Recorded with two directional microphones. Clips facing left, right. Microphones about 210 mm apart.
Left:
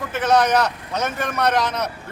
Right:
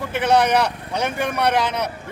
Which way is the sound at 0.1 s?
10° right (ahead or behind).